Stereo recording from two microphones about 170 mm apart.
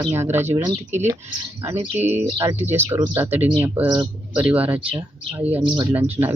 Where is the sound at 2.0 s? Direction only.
40° right (ahead or behind).